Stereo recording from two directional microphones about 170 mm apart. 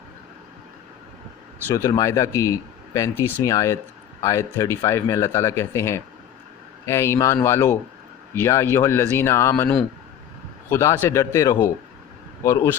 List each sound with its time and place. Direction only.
1.6 s speech: 20° left (ahead or behind)